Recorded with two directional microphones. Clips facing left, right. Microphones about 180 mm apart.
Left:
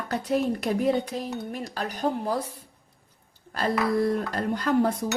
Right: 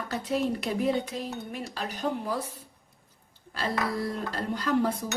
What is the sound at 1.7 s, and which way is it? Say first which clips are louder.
Speech: left 3 dB; 45° left (ahead or behind).